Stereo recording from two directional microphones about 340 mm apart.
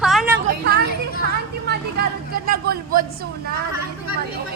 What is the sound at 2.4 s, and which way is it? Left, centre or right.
Speech, right.